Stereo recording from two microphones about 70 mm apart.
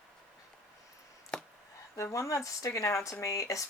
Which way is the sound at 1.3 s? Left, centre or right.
Centre.